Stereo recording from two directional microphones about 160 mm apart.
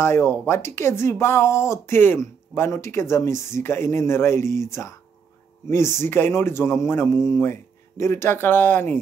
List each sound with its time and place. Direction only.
0.0 s speech: 15° left (ahead or behind)